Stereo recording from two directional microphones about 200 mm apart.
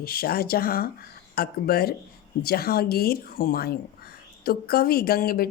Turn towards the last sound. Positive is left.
turn(degrees=50)  # may be behind; listen again after turning